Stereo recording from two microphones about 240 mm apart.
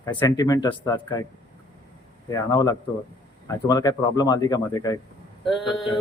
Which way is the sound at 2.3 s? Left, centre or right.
Centre.